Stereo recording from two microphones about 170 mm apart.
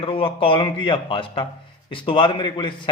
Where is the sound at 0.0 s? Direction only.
30° left (ahead or behind).